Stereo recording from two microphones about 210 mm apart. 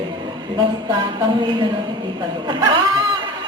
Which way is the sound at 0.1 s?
20° right (ahead or behind).